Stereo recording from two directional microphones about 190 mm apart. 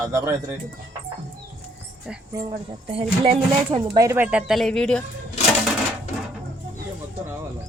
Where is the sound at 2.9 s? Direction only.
30° right (ahead or behind); by 5.0 s 5° left (ahead or behind).